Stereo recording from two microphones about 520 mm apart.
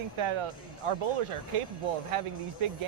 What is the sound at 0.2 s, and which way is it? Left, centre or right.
Speech, right.